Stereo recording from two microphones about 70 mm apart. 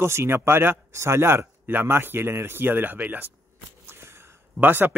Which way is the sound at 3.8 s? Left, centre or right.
Right.